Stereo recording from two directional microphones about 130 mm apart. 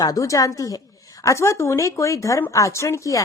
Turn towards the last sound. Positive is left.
turn(degrees=25)  # may be behind; listen again after turning